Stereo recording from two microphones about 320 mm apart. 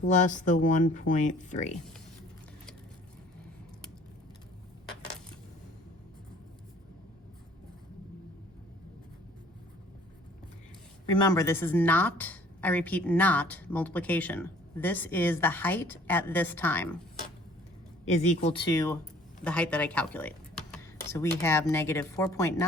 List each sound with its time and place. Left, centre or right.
0.1 s speech: left
11.2 s a woman's voice: centre
18.1 s speech: left